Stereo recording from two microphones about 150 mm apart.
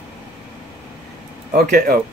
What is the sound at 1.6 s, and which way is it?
Speech, 65° right (ahead or behind).